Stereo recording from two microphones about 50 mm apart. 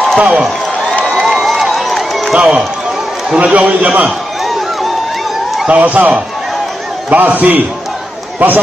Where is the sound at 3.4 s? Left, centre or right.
Right.